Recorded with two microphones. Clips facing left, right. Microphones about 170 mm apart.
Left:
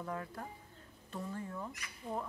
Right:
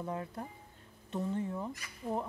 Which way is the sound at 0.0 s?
20° right (ahead or behind).